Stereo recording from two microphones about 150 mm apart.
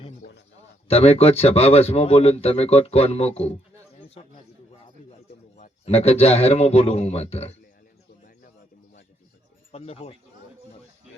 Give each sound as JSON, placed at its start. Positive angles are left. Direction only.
{"t": 0.9, "sound": "a man's voice", "side_deg": 40}
{"t": 5.5, "sound": "speech", "side_deg": 50}
{"t": 9.7, "sound": "speech", "side_deg": 45}